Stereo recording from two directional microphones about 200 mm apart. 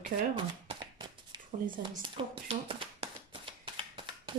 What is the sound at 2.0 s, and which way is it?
Tap, 25° right (ahead or behind).